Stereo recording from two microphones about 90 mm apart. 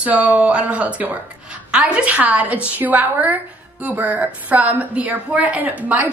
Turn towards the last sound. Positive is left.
turn(degrees=-15)  # may be behind; listen again after turning